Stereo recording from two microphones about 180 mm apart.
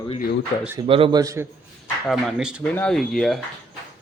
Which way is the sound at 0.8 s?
30° right (ahead or behind).